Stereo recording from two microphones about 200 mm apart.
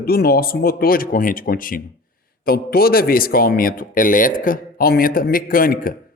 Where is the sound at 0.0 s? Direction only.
50° left (ahead or behind).